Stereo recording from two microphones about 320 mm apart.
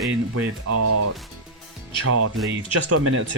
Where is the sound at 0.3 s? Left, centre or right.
Right.